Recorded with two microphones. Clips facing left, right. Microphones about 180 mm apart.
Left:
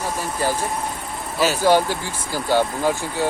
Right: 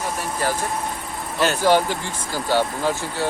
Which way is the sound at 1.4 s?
10° left (ahead or behind).